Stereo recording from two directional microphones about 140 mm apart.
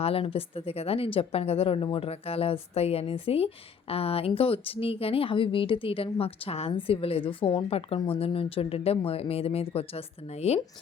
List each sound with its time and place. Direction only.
0.0 s a woman's voice: 45° left (ahead or behind)